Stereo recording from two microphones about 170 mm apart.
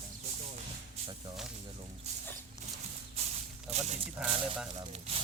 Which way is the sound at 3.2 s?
40° right (ahead or behind).